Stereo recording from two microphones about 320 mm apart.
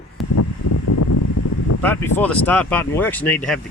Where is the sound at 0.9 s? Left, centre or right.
Left.